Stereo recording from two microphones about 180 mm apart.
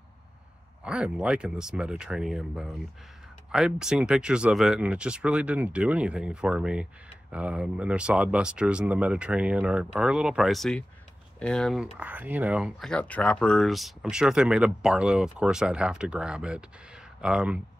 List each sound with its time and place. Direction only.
0.8 s speech: 5° right (ahead or behind)
12.9 s speech: 5° left (ahead or behind)